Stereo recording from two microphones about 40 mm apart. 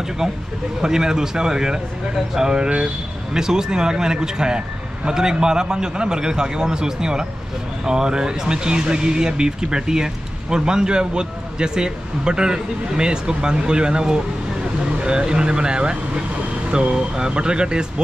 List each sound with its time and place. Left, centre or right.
0.7 s a man's voice: centre